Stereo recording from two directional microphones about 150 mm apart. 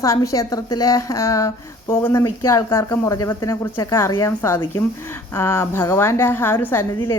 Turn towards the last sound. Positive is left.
turn(degrees=15)  # may be behind; listen again after turning